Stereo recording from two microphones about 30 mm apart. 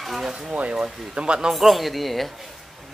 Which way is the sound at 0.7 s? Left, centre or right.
Right.